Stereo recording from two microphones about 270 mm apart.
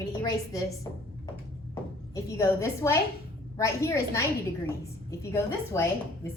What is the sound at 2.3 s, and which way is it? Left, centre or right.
A woman's voice, centre.